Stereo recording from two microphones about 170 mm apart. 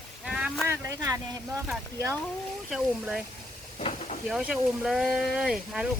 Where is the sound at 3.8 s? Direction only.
40° left (ahead or behind).